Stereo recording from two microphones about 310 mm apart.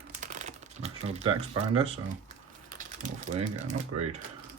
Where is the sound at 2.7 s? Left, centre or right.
Right.